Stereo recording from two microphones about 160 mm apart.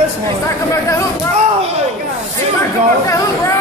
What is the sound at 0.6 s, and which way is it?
Speech, 20° left (ahead or behind).